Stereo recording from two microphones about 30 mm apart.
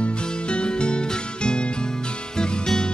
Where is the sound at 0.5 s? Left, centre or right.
Left.